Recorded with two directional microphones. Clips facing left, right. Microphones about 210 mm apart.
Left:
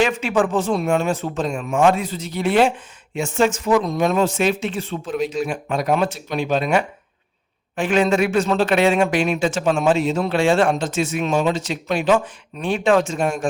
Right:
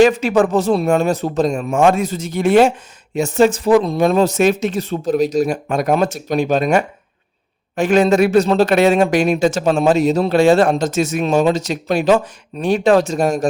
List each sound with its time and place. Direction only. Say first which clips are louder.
0.0 s a man's voice: right 6 dB; 40° right (ahead or behind)